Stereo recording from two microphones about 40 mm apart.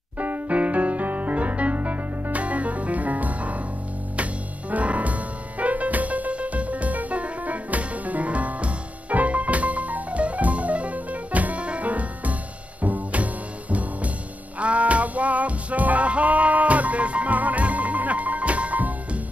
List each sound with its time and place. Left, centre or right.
0.2 s music: right